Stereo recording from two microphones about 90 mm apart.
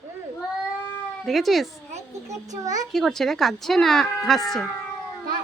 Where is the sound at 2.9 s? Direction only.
5° left (ahead or behind).